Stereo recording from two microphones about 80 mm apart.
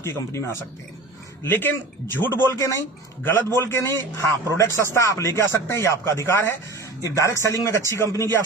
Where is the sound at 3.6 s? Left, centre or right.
Left.